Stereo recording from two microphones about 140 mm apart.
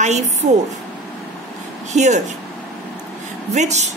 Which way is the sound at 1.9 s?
60° right (ahead or behind).